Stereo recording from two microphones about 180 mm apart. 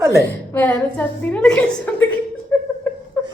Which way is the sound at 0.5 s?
10° left (ahead or behind).